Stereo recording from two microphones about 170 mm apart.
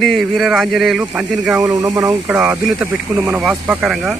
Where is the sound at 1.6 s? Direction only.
20° right (ahead or behind).